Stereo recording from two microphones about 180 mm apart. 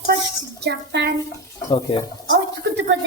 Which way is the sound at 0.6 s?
70° right (ahead or behind).